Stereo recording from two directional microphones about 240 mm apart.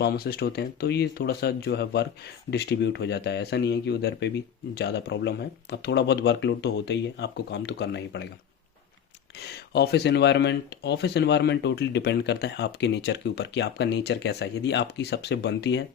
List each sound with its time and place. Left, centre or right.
0.0 s speech: left
9.4 s speech: left